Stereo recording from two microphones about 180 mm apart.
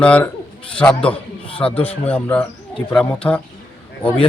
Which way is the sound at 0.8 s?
5° left (ahead or behind).